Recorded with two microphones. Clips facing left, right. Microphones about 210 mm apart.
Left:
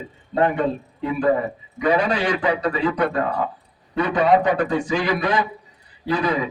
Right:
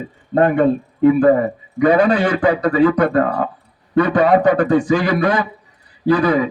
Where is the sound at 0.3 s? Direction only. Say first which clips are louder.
Right 6 dB; 50° right (ahead or behind).